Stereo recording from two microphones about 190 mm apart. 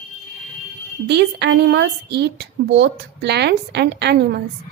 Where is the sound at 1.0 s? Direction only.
60° right (ahead or behind).